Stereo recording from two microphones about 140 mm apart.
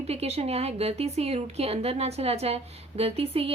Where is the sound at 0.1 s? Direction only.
45° right (ahead or behind).